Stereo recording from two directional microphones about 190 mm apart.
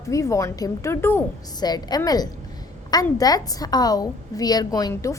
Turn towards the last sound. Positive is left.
turn(degrees=15)  # may be behind; listen again after turning